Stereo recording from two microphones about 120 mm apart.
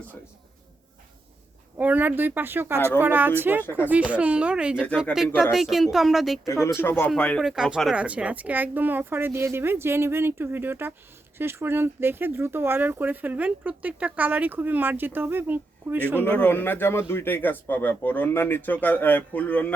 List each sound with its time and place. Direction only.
1.8 s a woman's voice: 15° right (ahead or behind)
6.5 s a man's voice: 20° left (ahead or behind)
7.4 s a woman's voice: 5° right (ahead or behind)
16.2 s a man's voice: 15° left (ahead or behind)